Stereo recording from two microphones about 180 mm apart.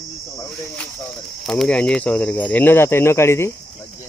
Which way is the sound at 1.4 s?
5° left (ahead or behind).